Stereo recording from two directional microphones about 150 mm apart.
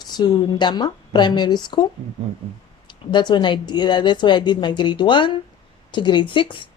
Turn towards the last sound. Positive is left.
turn(degrees=35)  # may be behind; listen again after turning